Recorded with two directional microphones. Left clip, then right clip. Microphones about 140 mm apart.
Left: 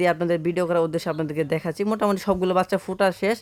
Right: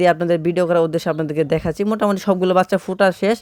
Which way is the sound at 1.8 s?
15° right (ahead or behind).